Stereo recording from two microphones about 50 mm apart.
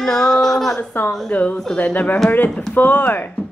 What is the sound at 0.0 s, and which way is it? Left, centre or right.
Speech, centre.